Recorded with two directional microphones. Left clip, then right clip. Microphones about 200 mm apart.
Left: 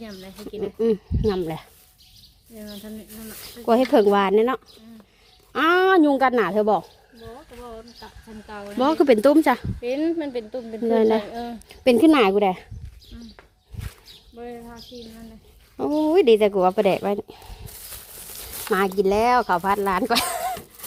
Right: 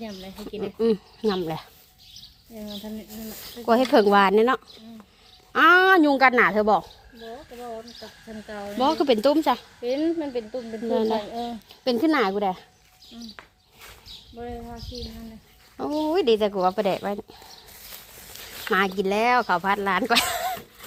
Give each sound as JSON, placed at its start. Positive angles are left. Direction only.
{"t": 0.0, "sound": "speech", "side_deg": 0}
{"t": 0.5, "sound": "speech", "side_deg": 25}
{"t": 2.8, "sound": "speech", "side_deg": 5}
{"t": 3.8, "sound": "speech", "side_deg": 15}
{"t": 8.8, "sound": "speech", "side_deg": 40}
{"t": 9.8, "sound": "speech", "side_deg": 25}
{"t": 10.8, "sound": "speech", "side_deg": 40}
{"t": 11.7, "sound": "speech", "side_deg": 45}
{"t": 14.3, "sound": "speech", "side_deg": 20}
{"t": 15.9, "sound": "speech", "side_deg": 25}
{"t": 16.1, "sound": "a sound", "side_deg": 40}
{"t": 18.7, "sound": "speech", "side_deg": 30}